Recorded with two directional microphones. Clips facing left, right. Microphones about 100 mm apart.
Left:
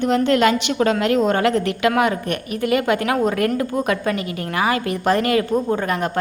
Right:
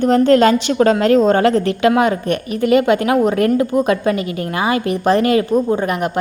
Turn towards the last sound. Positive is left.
turn(degrees=-15)  # may be behind; listen again after turning